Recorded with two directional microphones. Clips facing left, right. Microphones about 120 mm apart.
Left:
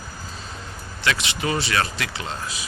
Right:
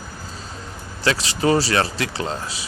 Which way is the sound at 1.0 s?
35° right (ahead or behind).